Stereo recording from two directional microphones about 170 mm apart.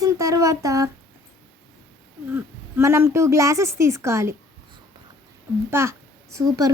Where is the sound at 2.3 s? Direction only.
15° right (ahead or behind).